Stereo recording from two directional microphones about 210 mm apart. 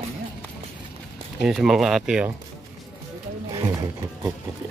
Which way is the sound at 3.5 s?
20° right (ahead or behind).